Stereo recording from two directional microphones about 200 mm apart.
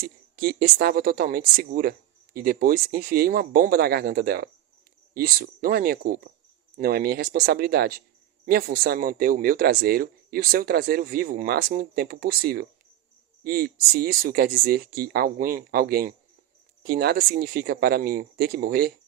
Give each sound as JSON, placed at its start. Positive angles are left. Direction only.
{"t": 0.0, "sound": "speech", "side_deg": -50}